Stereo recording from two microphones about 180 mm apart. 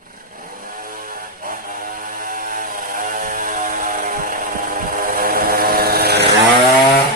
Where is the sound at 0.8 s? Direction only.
50° right (ahead or behind).